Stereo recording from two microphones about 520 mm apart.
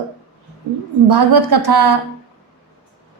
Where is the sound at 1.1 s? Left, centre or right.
Right.